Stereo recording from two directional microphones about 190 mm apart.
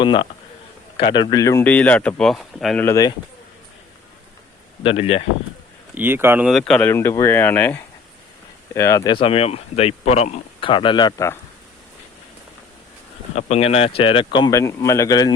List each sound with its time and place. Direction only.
0.0 s speech: 25° left (ahead or behind); by 2.8 s centre (ahead or behind)
2.8 s speech: 20° left (ahead or behind)
4.8 s speech: 30° left (ahead or behind)
5.9 s speech: 10° right (ahead or behind)
6.5 s speech: 5° left (ahead or behind)
9.2 s speech: 30° left (ahead or behind)
13.3 s speech: 35° left (ahead or behind)